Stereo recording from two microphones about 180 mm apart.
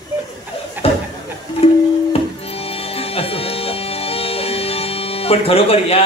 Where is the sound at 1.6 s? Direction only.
35° left (ahead or behind).